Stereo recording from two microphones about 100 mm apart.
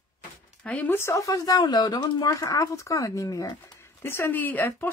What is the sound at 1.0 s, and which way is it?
Speech, 30° left (ahead or behind).